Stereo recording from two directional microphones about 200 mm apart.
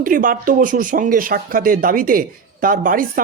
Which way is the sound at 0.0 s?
45° right (ahead or behind).